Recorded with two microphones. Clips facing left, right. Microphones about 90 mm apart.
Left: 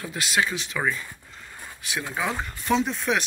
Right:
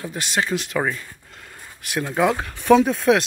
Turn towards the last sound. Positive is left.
turn(degrees=-50)  # may be behind; listen again after turning